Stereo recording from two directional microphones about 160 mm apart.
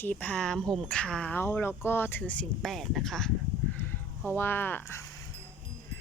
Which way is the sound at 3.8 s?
10° left (ahead or behind).